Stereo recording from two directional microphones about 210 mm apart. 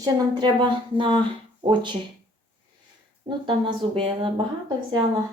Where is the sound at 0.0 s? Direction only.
20° right (ahead or behind).